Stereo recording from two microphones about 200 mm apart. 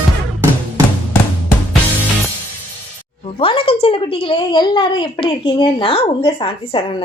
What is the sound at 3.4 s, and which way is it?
A woman's voice, 25° left (ahead or behind).